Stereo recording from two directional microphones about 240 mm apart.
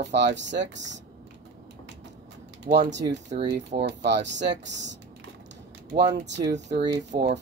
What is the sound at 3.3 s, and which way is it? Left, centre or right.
Speech, right.